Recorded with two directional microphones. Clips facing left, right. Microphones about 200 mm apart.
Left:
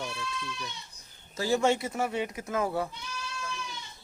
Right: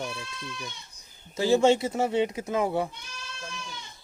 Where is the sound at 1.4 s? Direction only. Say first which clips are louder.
Right 5 dB; 25° right (ahead or behind).